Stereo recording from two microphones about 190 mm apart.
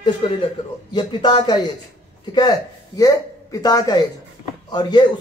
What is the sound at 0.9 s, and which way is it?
Speech, 25° left (ahead or behind).